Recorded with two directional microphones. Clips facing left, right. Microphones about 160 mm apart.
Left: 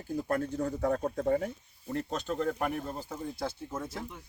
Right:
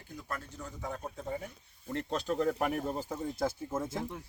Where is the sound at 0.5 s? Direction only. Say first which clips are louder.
Left 11 dB; 55° left (ahead or behind).